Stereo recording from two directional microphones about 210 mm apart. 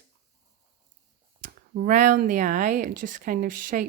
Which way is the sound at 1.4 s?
40° right (ahead or behind).